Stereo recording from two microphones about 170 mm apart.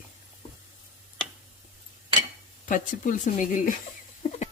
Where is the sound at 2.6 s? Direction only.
50° left (ahead or behind).